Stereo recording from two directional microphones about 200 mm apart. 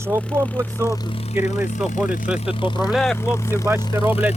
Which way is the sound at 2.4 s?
25° left (ahead or behind).